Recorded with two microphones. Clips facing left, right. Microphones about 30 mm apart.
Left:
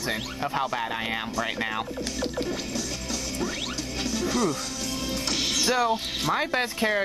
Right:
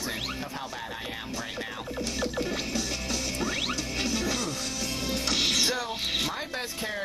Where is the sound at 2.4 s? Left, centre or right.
Centre.